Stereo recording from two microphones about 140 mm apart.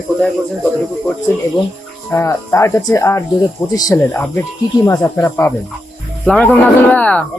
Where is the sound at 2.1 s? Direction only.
20° left (ahead or behind).